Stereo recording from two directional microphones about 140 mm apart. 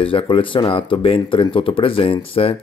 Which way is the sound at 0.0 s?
40° left (ahead or behind).